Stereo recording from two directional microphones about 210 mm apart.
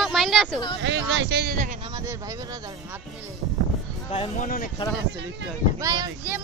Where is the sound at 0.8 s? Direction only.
60° right (ahead or behind).